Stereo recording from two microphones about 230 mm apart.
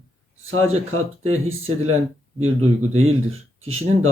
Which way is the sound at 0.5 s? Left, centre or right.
Right.